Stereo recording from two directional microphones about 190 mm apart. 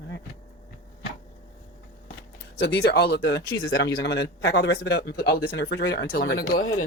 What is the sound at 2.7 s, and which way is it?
A man's voice, 60° left (ahead or behind).